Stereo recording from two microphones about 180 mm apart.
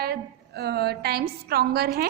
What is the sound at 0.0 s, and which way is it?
A woman's voice, 60° right (ahead or behind).